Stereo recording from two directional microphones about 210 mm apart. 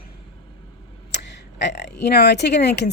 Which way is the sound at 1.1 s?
55° left (ahead or behind).